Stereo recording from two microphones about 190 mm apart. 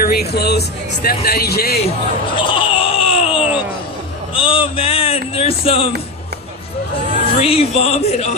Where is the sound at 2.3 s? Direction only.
30° left (ahead or behind).